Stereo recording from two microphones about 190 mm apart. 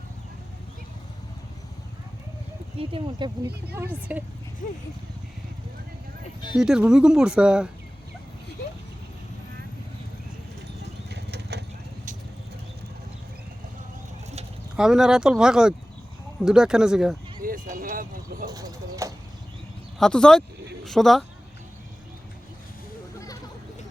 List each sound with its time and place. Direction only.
2.7 s speech: 25° right (ahead or behind)
3.8 s speech: 10° right (ahead or behind)
6.6 s speech: 5° right (ahead or behind)
11.1 s a sound: 60° right (ahead or behind)
14.8 s speech: 5° right (ahead or behind)
17.4 s vehicle: 45° right (ahead or behind)
18.5 s speech: 15° right (ahead or behind)
20.0 s speech: 5° left (ahead or behind)